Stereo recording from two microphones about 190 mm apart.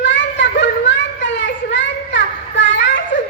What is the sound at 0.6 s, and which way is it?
Children playing, 70° left (ahead or behind).